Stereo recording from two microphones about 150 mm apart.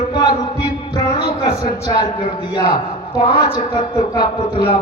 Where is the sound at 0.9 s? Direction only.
30° left (ahead or behind).